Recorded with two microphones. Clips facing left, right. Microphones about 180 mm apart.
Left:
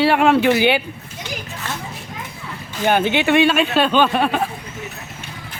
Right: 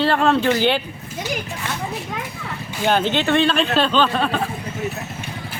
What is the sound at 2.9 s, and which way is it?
Speech, 10° left (ahead or behind).